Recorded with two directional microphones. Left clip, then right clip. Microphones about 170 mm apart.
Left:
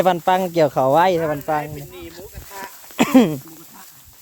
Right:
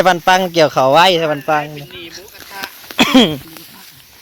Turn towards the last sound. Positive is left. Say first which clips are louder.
# right 5 dB
turn(degrees=0)  # may be behind; listen again after turning